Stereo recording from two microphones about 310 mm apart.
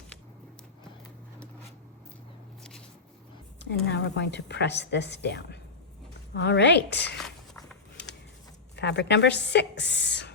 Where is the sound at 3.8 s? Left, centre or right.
Left.